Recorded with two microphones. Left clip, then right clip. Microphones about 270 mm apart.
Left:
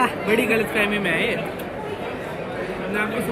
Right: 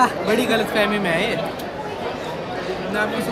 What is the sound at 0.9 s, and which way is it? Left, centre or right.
Speech, right.